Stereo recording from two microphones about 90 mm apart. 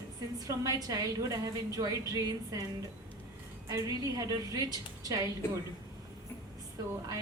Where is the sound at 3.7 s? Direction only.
45° right (ahead or behind).